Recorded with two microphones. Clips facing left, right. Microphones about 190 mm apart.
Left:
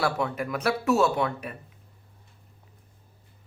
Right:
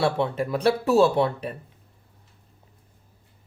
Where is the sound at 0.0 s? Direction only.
25° right (ahead or behind).